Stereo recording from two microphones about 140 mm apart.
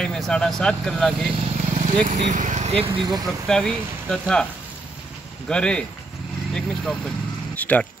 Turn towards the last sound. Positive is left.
turn(degrees=10)  # may be behind; listen again after turning